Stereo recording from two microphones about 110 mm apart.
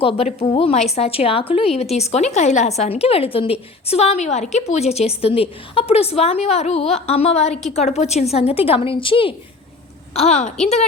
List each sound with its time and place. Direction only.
0.0 s a woman's voice: 55° left (ahead or behind)
10.2 s a woman's voice: 75° left (ahead or behind)